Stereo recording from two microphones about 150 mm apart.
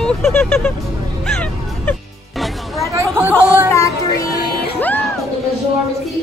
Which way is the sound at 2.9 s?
15° right (ahead or behind).